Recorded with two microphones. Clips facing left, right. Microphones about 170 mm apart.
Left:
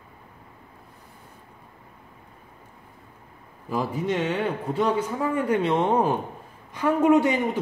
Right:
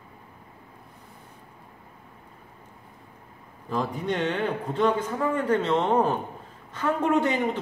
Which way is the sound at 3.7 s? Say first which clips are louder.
Left 2 dB; 5° left (ahead or behind).